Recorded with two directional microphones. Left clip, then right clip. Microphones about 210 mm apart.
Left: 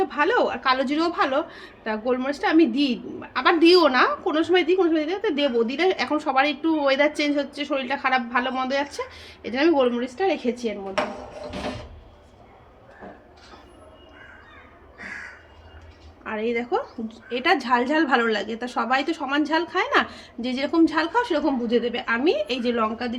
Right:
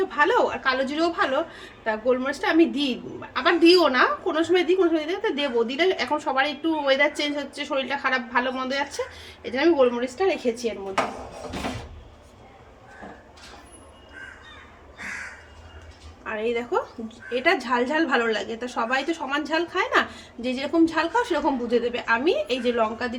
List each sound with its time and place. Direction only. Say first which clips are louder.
0.0 s a woman's voice: even; 30° left (ahead or behind)
16.2 s a woman's voice: even; 30° left (ahead or behind)